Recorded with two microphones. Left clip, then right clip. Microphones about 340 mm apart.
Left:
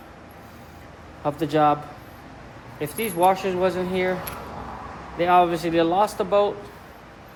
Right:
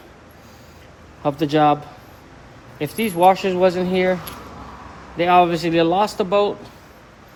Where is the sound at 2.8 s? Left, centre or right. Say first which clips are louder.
Right 5 dB; right.